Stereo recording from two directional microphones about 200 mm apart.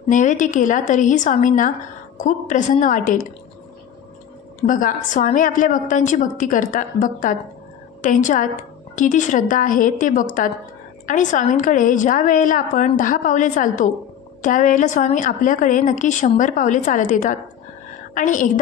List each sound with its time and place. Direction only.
0.1 s a woman's voice: 40° left (ahead or behind)
4.6 s a woman's voice: 40° left (ahead or behind)